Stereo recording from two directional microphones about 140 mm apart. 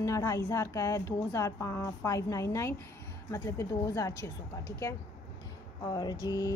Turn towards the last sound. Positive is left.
turn(degrees=25)  # may be behind; listen again after turning